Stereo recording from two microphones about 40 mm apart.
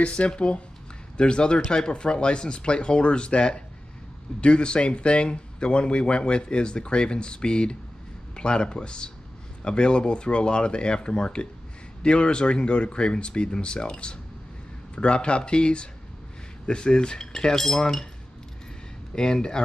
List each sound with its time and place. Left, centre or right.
0.0 s speech: left; by 18.0 s centre
19.1 s speech: centre